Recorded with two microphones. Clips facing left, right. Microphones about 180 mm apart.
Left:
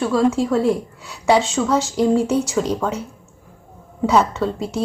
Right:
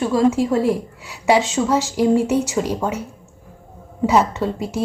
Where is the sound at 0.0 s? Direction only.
20° right (ahead or behind).